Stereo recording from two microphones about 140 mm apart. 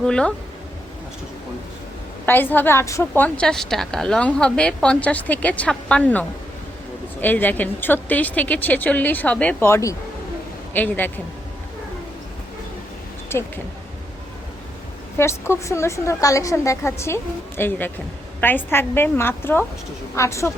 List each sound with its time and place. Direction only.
0.0 s a woman's voice: 5° left (ahead or behind)
2.2 s a woman's voice: 15° left (ahead or behind)
13.3 s a woman's voice: 20° left (ahead or behind)
15.2 s a woman's voice: 20° left (ahead or behind)